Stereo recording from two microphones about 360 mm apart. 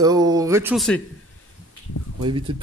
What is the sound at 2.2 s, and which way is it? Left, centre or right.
Speech, centre.